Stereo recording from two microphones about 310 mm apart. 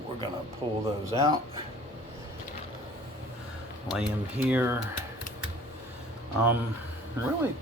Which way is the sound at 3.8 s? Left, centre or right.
Centre.